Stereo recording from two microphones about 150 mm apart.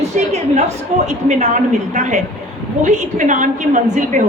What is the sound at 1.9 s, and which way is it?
A woman's voice, 50° right (ahead or behind).